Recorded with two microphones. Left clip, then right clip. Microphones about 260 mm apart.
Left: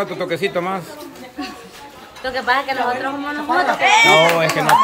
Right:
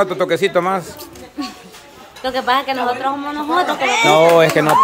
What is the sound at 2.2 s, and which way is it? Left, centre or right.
Speech, right.